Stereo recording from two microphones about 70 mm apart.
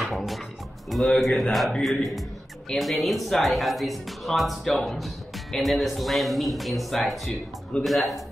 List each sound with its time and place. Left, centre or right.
0.0 s music: centre
0.8 s speech: centre